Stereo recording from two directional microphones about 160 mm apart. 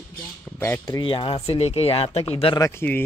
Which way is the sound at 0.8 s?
30° left (ahead or behind).